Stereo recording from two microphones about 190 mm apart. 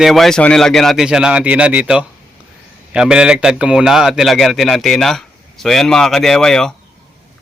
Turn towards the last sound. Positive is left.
turn(degrees=5)  # may be behind; listen again after turning